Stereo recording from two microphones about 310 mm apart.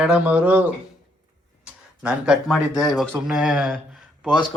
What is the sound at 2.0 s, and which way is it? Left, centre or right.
A man's voice, centre.